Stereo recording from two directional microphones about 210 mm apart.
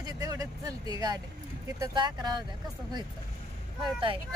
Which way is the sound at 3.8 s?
25° right (ahead or behind).